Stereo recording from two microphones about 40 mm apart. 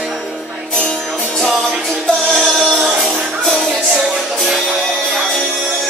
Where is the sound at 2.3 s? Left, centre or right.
Centre.